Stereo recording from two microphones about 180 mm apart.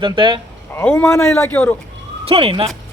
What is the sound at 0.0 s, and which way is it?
Speech, 30° right (ahead or behind).